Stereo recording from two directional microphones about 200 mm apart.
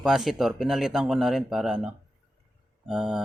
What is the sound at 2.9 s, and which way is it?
Speech, 5° right (ahead or behind).